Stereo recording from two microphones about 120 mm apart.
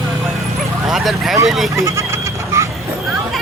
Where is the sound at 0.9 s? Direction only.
Centre (ahead or behind).